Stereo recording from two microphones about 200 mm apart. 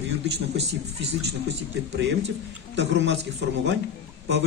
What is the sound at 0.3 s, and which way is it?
Speech, 55° right (ahead or behind).